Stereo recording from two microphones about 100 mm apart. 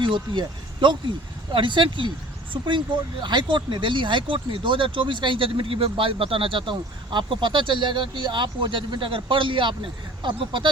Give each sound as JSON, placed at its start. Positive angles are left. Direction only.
{"t": 0.0, "sound": "speech", "side_deg": -55}